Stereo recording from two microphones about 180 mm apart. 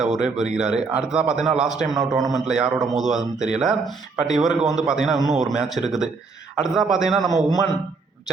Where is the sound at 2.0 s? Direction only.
20° right (ahead or behind).